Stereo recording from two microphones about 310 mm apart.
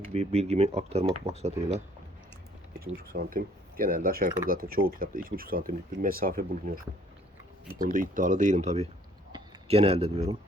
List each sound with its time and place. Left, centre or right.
0.1 s speech: centre
2.8 s speech: right
7.8 s speech: right